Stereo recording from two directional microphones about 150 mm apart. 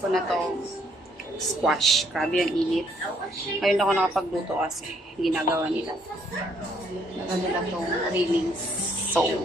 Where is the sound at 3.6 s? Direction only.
Centre (ahead or behind).